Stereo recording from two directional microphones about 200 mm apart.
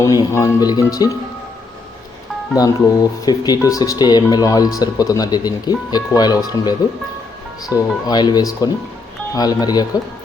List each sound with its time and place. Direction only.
0.0 s speech: 15° left (ahead or behind)
2.6 s speech: 20° left (ahead or behind)
7.8 s speech: 20° left (ahead or behind)